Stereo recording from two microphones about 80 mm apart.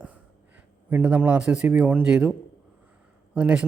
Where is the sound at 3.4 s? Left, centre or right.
Centre.